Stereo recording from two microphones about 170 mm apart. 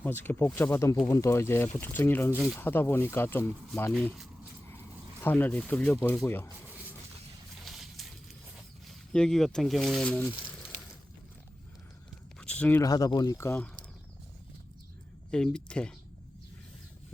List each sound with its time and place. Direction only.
0.0 s speech: 10° left (ahead or behind)
3.9 s speech: centre (ahead or behind)
7.6 s a sound: centre (ahead or behind)
9.1 s speech: 5° left (ahead or behind)
12.4 s a sound: 5° left (ahead or behind)
12.8 s speech: 20° left (ahead or behind)
15.3 s speech: 5° left (ahead or behind)